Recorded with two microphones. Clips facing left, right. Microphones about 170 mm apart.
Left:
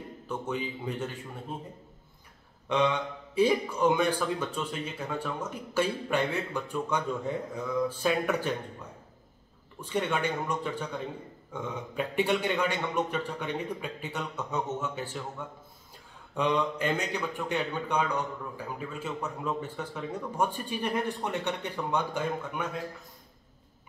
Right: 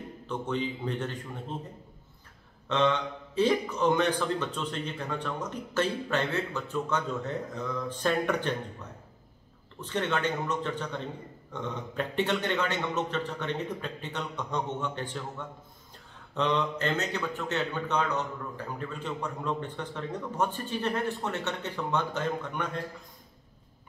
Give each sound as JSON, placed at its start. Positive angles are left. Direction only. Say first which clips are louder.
{"t": 0.3, "sound": "a man's voice", "louder": "right 2 dB", "side_deg": 10}
{"t": 2.7, "sound": "a man's voice", "louder": "even", "side_deg": 10}
{"t": 9.8, "sound": "a man's voice", "louder": "even", "side_deg": 10}